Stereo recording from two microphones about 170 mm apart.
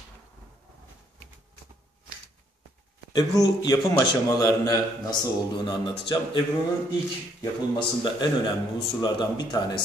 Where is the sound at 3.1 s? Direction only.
20° left (ahead or behind).